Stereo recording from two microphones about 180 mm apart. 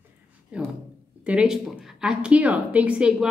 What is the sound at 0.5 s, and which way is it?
A woman's voice, 5° right (ahead or behind).